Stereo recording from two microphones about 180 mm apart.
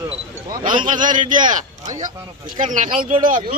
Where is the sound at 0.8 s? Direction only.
45° right (ahead or behind).